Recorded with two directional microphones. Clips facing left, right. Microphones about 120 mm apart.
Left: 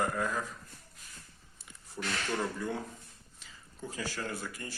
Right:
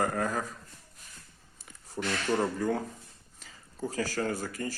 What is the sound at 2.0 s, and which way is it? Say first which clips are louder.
A man's voice: right 5 dB; 35° right (ahead or behind).